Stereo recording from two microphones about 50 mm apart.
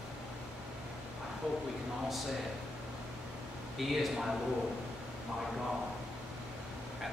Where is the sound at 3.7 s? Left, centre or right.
Centre.